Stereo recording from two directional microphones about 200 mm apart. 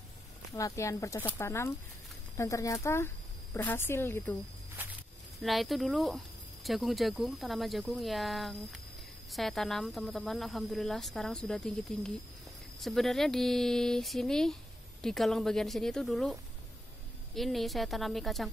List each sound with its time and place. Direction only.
0.6 s speech: 15° left (ahead or behind)
5.4 s speech: centre (ahead or behind)